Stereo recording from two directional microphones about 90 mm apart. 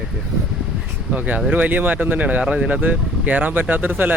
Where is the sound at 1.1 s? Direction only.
20° right (ahead or behind).